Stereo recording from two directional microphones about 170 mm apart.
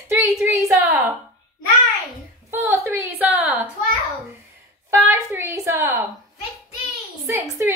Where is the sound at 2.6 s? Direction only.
15° right (ahead or behind).